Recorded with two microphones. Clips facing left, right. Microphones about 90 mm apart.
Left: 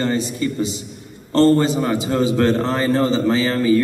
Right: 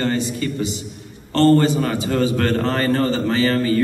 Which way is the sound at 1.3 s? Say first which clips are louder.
Even; 30° left (ahead or behind).